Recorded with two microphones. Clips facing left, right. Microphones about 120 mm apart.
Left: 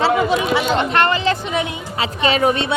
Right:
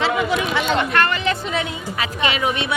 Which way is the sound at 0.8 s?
25° left (ahead or behind).